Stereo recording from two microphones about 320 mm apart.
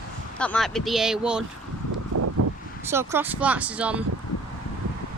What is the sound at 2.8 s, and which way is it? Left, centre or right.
Speech, centre.